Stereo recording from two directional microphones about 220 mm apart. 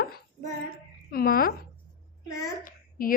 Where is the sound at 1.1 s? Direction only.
40° left (ahead or behind).